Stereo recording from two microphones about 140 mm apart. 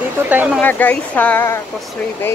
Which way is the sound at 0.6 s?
15° left (ahead or behind).